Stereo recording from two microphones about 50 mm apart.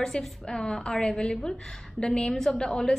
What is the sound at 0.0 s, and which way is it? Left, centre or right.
A woman's voice, centre.